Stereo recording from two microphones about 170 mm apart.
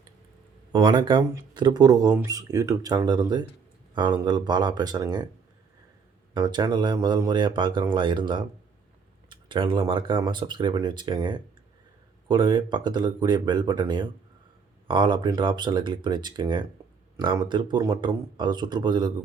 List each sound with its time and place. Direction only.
0.7 s speech: 25° right (ahead or behind)
6.3 s speech: 25° right (ahead or behind)